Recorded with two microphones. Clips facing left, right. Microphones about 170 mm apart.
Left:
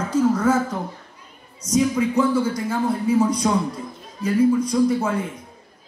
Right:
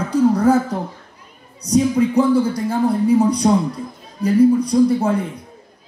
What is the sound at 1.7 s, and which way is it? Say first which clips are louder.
A woman's voice: right 4 dB; 35° right (ahead or behind).